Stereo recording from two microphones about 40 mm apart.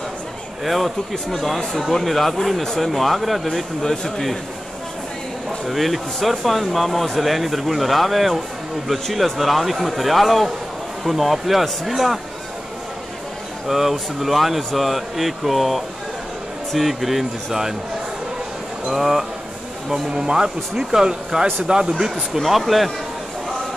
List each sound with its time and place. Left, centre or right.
0.7 s speech: centre
5.7 s speech: centre
13.7 s speech: centre
18.9 s speech: centre
19.9 s speech: centre
22.3 s speech: centre